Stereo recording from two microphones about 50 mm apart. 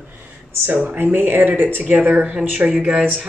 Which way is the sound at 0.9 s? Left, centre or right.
Right.